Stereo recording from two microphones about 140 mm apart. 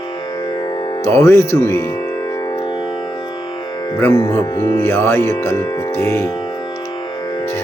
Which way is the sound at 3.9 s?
20° left (ahead or behind).